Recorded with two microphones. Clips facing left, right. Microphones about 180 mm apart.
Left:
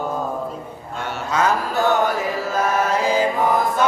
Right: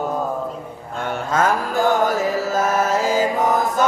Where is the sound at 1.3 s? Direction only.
45° right (ahead or behind).